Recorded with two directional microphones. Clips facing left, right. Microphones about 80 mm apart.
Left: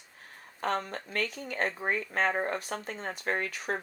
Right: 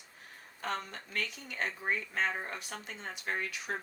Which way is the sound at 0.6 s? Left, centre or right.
Left.